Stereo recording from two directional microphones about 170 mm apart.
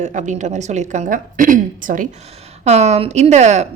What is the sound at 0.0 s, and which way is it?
A woman's voice, 45° right (ahead or behind).